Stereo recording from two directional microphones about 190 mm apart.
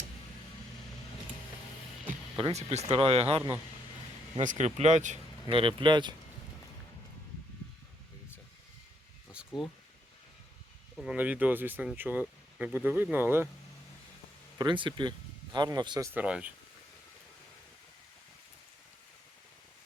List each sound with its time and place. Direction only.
2.4 s speech: 35° right (ahead or behind)
10.9 s speech: 5° right (ahead or behind)
14.6 s speech: 25° right (ahead or behind); by 16.5 s 5° right (ahead or behind)